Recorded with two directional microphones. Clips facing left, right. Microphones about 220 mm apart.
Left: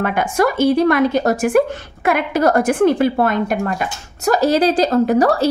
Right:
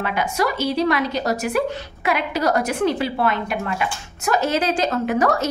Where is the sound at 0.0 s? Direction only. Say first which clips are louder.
Left 5 dB; 50° left (ahead or behind).